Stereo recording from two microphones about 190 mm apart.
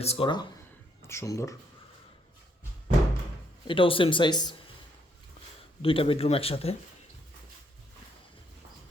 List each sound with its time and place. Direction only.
0.0 s speech: 30° left (ahead or behind)
1.0 s speech: 15° left (ahead or behind)
3.7 s speech: 25° left (ahead or behind)
5.8 s speech: 30° left (ahead or behind)